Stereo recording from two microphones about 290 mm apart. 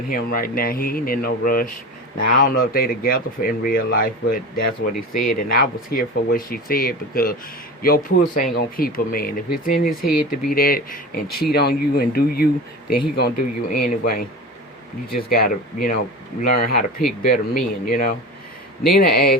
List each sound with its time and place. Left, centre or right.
0.1 s speech: left